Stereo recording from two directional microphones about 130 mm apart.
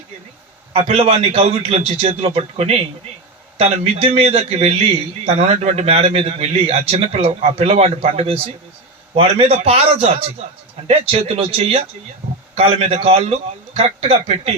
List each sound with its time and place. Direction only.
0.7 s a man's voice: 45° right (ahead or behind)